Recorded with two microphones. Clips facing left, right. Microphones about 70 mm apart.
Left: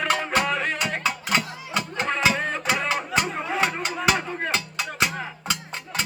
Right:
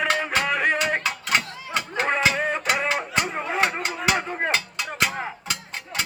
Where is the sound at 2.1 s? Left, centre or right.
Centre.